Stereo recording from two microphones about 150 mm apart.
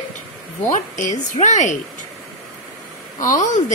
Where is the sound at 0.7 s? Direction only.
55° left (ahead or behind).